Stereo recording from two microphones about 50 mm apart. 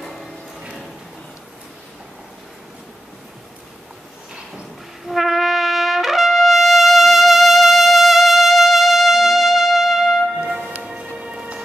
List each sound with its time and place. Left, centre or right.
0.0 s a sound: centre
5.0 s trumpet: centre
10.4 s music: centre